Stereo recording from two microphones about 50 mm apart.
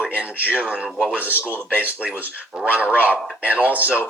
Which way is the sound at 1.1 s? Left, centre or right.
Right.